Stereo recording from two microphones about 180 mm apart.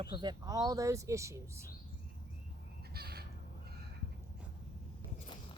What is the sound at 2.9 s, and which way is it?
Crow, 60° right (ahead or behind).